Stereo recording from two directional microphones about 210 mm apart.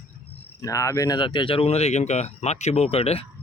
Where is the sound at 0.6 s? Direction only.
15° left (ahead or behind).